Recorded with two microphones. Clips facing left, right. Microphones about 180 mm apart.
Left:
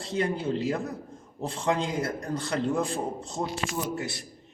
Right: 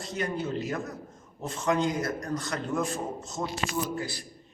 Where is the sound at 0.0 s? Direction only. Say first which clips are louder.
Left 3 dB; 30° left (ahead or behind).